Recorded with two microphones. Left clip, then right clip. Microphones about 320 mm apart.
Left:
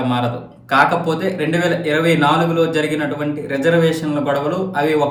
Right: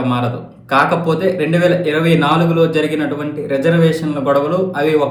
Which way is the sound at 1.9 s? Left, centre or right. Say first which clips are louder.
Right 1 dB; left.